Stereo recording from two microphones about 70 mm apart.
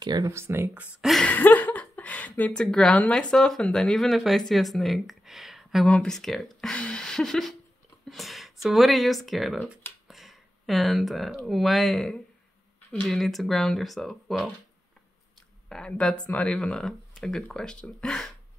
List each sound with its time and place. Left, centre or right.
0.0 s speech: right
0.3 s speech: right
1.2 s a sound: left
2.6 s speech: centre
5.9 s speech: centre
6.1 s speech: centre
10.0 s a sound: centre
11.4 s speech: centre
15.7 s speech: centre